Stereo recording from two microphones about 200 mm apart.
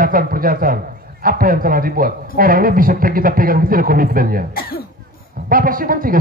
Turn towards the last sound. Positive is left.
turn(degrees=-45)  # may be behind; listen again after turning